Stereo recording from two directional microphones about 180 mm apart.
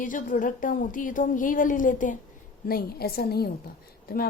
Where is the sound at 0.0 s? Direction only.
50° left (ahead or behind).